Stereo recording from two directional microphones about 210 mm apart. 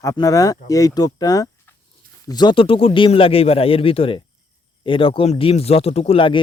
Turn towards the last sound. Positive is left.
turn(degrees=25)  # may be behind; listen again after turning